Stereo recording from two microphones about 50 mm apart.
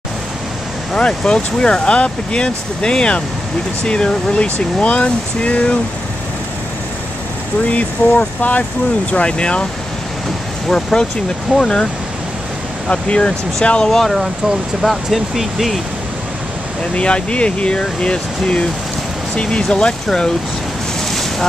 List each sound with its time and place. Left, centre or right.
0.9 s speech: centre
7.7 s speech: left
9.1 s speech: left
10.7 s speech: centre
16.9 s speech: left
21.1 s boat: centre